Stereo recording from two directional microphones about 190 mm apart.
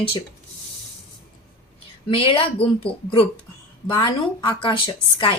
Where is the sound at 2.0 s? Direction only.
30° left (ahead or behind).